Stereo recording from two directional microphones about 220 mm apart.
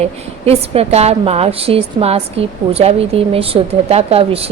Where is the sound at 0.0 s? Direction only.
30° right (ahead or behind).